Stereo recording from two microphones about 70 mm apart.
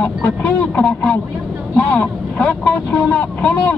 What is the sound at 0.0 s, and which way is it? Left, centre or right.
Speech, left.